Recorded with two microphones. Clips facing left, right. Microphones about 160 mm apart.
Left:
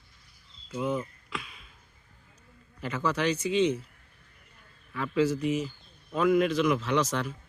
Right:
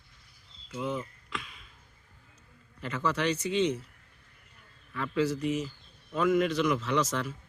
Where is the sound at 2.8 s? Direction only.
Centre (ahead or behind).